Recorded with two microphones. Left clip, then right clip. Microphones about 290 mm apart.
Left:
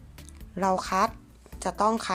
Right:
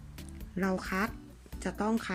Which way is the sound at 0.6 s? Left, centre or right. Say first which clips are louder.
Left 9 dB; centre.